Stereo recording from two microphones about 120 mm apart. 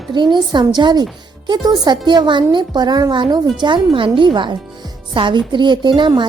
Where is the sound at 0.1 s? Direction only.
40° right (ahead or behind).